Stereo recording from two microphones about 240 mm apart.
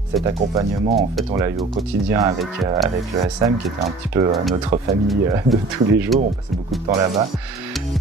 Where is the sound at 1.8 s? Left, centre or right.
Centre.